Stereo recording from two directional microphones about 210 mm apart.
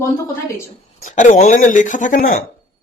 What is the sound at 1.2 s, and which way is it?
Speech, 35° left (ahead or behind).